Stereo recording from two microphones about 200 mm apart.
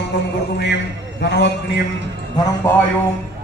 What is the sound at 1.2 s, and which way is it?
Speech, 55° left (ahead or behind).